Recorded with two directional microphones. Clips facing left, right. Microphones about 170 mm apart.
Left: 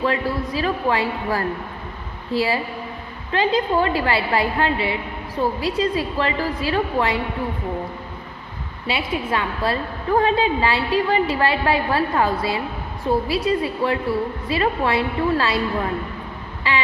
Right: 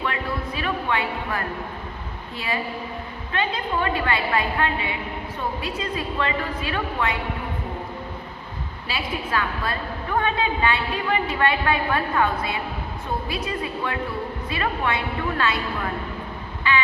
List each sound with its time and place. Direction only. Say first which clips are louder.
0.0 s a woman's voice: left 6 dB; 35° left (ahead or behind)
8.9 s a woman's voice: left 4 dB; 25° left (ahead or behind)
16.7 s a sound: even; 30° left (ahead or behind)